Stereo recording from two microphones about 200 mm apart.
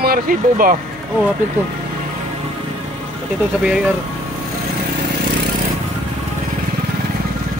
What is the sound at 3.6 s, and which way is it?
Speech, 5° right (ahead or behind).